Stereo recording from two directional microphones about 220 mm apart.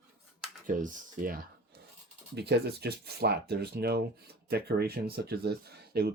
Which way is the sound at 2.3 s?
50° right (ahead or behind).